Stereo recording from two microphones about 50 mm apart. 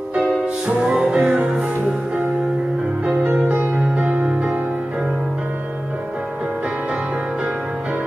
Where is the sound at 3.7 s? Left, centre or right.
Centre.